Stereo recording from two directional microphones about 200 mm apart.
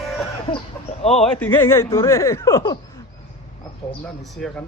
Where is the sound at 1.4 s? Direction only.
10° left (ahead or behind).